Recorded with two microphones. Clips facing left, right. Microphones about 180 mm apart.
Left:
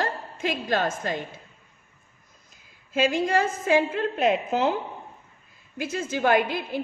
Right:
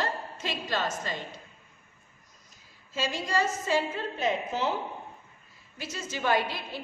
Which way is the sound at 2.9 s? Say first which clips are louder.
Left 8 dB; 55° left (ahead or behind).